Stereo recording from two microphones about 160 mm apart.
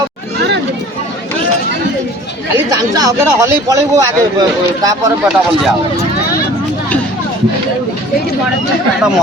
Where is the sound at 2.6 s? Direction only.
25° right (ahead or behind).